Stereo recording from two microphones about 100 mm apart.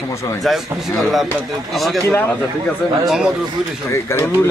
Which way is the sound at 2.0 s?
25° left (ahead or behind).